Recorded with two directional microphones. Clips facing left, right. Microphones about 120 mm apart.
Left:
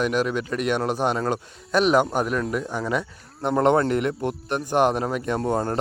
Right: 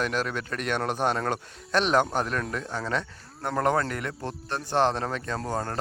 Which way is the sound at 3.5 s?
20° left (ahead or behind).